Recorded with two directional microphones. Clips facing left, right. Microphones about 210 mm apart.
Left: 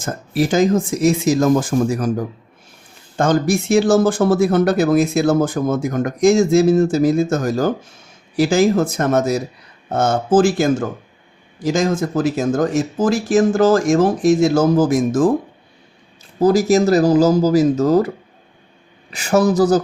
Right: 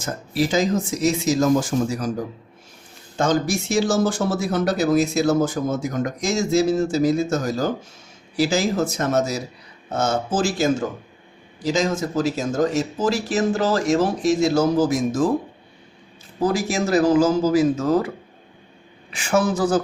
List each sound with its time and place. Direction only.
0.0 s speech: 50° left (ahead or behind)
3.2 s speech: 55° left (ahead or behind)
16.4 s speech: 40° left (ahead or behind)
19.1 s speech: 40° left (ahead or behind)